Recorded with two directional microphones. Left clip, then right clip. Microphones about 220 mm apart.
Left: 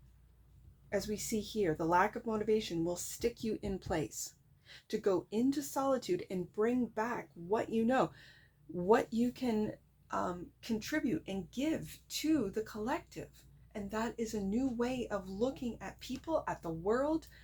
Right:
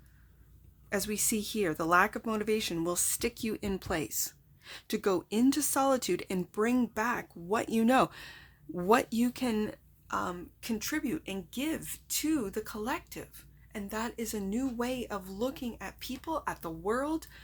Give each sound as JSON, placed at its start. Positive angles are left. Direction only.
{"t": 0.9, "sound": "speech", "side_deg": -35}